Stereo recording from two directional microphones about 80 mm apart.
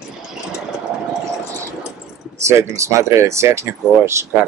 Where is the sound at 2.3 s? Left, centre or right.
Right.